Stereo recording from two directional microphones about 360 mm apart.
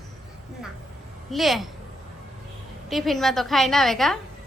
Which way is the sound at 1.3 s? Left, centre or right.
Centre.